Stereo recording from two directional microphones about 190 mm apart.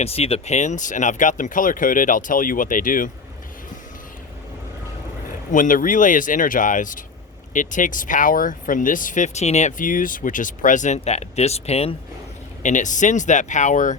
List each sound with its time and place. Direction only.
0.0 s speech: 30° left (ahead or behind)
5.5 s speech: 45° left (ahead or behind)